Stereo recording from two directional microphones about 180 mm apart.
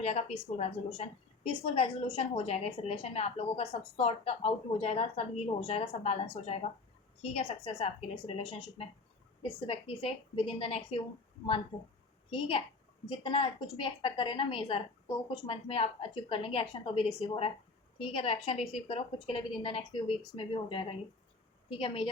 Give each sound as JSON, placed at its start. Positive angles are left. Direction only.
{"t": 0.0, "sound": "a woman's voice", "side_deg": 35}
{"t": 12.3, "sound": "a woman's voice", "side_deg": 30}